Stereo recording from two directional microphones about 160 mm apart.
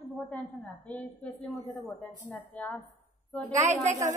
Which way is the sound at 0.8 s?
10° left (ahead or behind).